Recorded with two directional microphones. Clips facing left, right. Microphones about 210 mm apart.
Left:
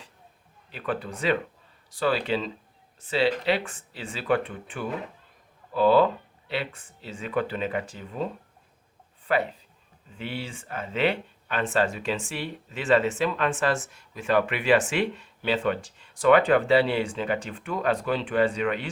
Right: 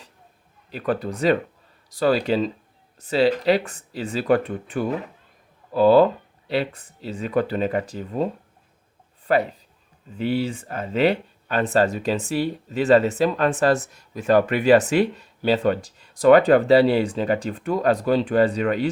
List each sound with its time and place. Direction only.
0.7 s speech: 40° right (ahead or behind)